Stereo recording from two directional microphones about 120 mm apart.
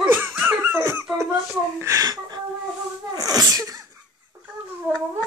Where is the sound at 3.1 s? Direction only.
30° right (ahead or behind).